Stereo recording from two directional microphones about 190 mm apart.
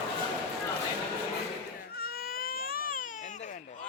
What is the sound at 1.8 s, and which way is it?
Baby cry, 55° left (ahead or behind).